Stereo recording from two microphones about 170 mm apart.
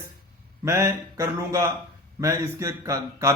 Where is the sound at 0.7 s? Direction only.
15° right (ahead or behind).